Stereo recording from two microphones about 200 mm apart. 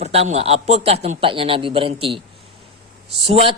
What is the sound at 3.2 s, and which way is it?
Speech, 30° right (ahead or behind).